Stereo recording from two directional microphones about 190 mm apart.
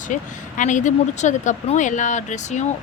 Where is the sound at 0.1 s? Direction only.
40° left (ahead or behind).